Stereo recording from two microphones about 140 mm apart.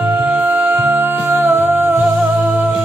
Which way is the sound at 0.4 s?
15° right (ahead or behind).